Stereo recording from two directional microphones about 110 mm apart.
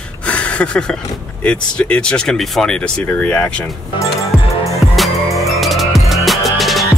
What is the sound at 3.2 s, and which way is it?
Speech, 15° left (ahead or behind).